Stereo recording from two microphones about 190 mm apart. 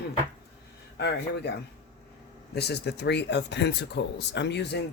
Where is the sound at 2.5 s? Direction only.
60° left (ahead or behind).